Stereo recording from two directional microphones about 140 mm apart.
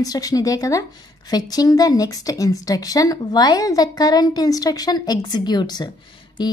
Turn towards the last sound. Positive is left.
turn(degrees=30)  # may be behind; listen again after turning